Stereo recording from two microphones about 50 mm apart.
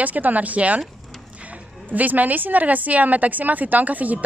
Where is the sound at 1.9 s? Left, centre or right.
Right.